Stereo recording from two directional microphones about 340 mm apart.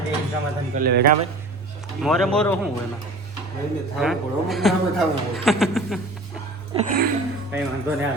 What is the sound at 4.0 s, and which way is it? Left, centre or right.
Speech, centre.